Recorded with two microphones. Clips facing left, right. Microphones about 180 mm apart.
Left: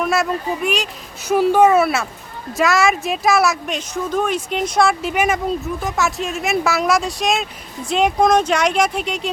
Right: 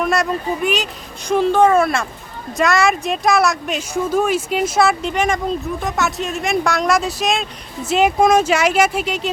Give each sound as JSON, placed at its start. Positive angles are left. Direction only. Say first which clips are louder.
{"t": 0.0, "sound": "speech", "louder": "right 1 dB", "side_deg": 0}
{"t": 5.1, "sound": "speech", "louder": "even", "side_deg": 10}